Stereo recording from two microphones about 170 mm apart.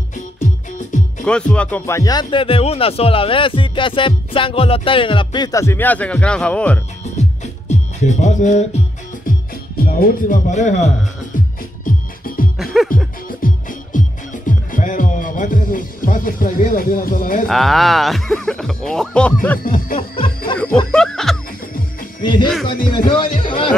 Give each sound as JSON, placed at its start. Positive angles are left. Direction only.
{"t": 1.2, "sound": "speech", "side_deg": 5}
{"t": 7.2, "sound": "music", "side_deg": 45}
{"t": 9.8, "sound": "speech", "side_deg": 60}
{"t": 11.3, "sound": "music", "side_deg": 55}
{"t": 17.5, "sound": "speech", "side_deg": 0}
{"t": 19.6, "sound": "music", "side_deg": 55}
{"t": 20.9, "sound": "music", "side_deg": 5}
{"t": 22.2, "sound": "speech", "side_deg": 30}